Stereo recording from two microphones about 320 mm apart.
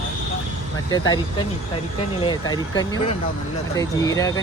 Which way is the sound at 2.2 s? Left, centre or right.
Centre.